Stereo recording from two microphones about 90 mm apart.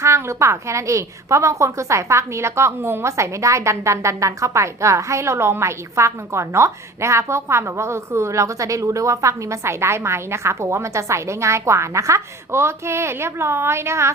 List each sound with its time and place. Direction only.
0.0 s a woman's voice: 30° right (ahead or behind)